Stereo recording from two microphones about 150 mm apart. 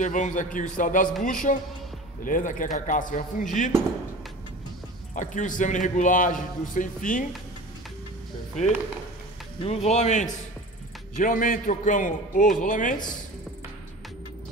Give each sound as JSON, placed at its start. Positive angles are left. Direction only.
{"t": 0.0, "sound": "a man's voice", "side_deg": 55}
{"t": 5.1, "sound": "a man's voice", "side_deg": 55}
{"t": 9.6, "sound": "speech", "side_deg": 45}
{"t": 11.1, "sound": "a man's voice", "side_deg": 65}